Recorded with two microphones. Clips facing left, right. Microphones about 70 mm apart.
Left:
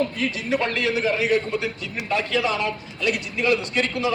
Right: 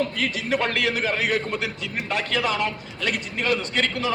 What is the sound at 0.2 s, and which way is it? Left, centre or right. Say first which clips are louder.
Speech: even; right.